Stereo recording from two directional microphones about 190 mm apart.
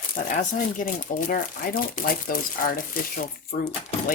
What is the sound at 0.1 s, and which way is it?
Speech, 45° left (ahead or behind).